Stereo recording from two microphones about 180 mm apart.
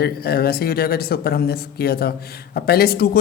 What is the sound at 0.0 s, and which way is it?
Speech, 60° left (ahead or behind).